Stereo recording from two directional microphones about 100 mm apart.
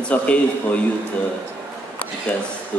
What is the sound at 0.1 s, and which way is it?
Speech, 15° left (ahead or behind).